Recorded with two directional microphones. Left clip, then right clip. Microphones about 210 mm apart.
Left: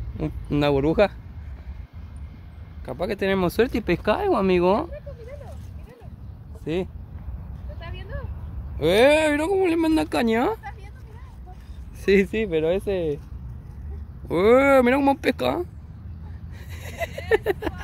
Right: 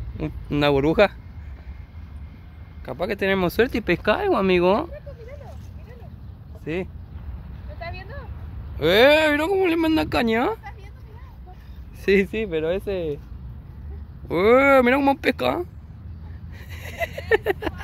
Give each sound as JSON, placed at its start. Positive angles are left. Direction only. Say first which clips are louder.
{"t": 0.2, "sound": "speech", "louder": "right 1 dB", "side_deg": 15}
{"t": 0.7, "sound": "speech", "louder": "right 2 dB", "side_deg": 0}
{"t": 2.8, "sound": "speech", "louder": "right 1 dB", "side_deg": 5}
{"t": 6.6, "sound": "speech", "louder": "left 1 dB", "side_deg": 20}
{"t": 8.7, "sound": "speech", "louder": "right 2 dB", "side_deg": 5}
{"t": 12.0, "sound": "speech", "louder": "even", "side_deg": 10}
{"t": 12.3, "sound": "speech", "louder": "left 2 dB", "side_deg": 25}
{"t": 14.2, "sound": "speech", "louder": "right 1 dB", "side_deg": 10}
{"t": 16.7, "sound": "vehicle", "louder": "right 2 dB", "side_deg": 10}